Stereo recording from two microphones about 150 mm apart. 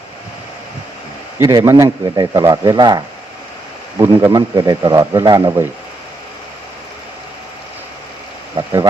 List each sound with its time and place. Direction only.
1.4 s speech: 20° right (ahead or behind)
4.0 s speech: 25° right (ahead or behind)
8.5 s speech: 25° right (ahead or behind)